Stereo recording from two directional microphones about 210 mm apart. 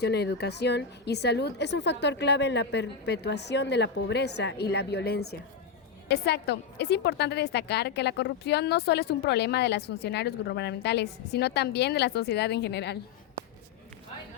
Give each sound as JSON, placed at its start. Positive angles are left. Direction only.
{"t": 0.0, "sound": "a woman's voice", "side_deg": 50}